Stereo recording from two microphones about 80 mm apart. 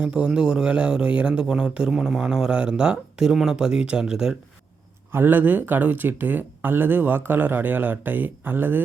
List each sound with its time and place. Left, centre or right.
0.0 s speech: centre
5.1 s speech: right